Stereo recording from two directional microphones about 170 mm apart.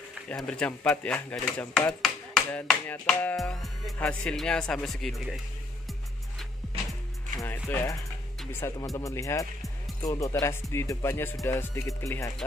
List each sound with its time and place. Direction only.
0.3 s speech: 5° left (ahead or behind)
7.3 s music: 15° left (ahead or behind)
8.5 s speech: 15° left (ahead or behind)